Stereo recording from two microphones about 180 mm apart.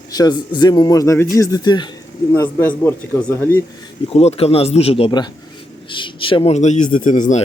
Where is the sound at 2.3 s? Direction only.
15° left (ahead or behind).